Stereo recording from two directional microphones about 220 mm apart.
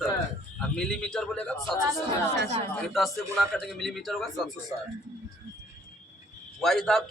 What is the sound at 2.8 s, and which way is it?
A man's voice, centre (ahead or behind).